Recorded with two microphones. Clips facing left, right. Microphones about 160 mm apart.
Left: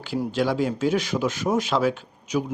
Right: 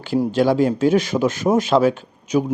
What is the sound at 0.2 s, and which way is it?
A man's voice, 50° right (ahead or behind).